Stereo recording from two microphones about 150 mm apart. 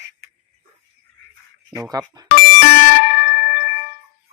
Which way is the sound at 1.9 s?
25° right (ahead or behind).